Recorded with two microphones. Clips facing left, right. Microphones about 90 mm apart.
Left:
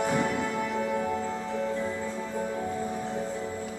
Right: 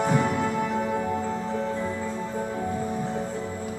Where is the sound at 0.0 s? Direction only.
20° right (ahead or behind).